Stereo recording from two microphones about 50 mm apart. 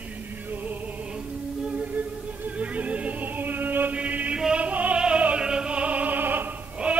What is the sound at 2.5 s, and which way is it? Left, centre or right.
Music, right.